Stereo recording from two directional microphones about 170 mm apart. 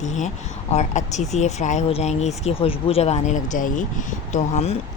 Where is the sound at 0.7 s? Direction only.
45° left (ahead or behind).